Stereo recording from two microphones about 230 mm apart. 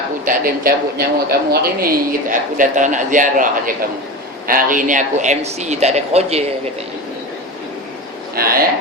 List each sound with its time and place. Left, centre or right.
0.3 s a man's voice: right
8.4 s a man's voice: right